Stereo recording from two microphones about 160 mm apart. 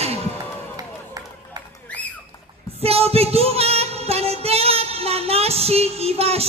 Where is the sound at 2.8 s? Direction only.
40° right (ahead or behind).